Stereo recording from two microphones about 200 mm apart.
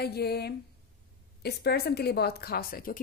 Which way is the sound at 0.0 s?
55° left (ahead or behind).